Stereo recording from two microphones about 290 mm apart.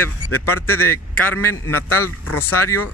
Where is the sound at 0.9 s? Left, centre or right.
Centre.